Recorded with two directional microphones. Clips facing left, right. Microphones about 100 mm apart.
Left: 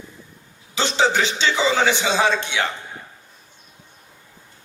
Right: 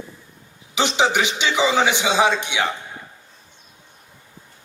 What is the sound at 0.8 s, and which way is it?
A man's voice, 15° right (ahead or behind).